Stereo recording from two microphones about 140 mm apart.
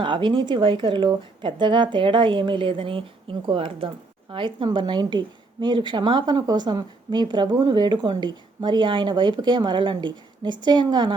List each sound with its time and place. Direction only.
0.0 s a woman's voice: 35° right (ahead or behind)